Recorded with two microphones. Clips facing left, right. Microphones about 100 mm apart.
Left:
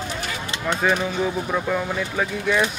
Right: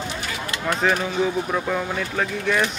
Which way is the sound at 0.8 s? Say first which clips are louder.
Even; 5° left (ahead or behind).